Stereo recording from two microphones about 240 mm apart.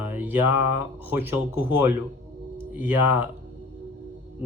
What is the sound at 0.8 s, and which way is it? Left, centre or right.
Speech, centre.